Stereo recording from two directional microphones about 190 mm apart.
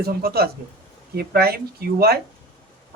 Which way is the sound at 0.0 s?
55° right (ahead or behind).